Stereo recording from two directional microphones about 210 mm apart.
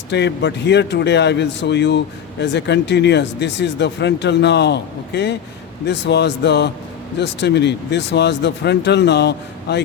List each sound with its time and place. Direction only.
0.1 s speech: 55° left (ahead or behind)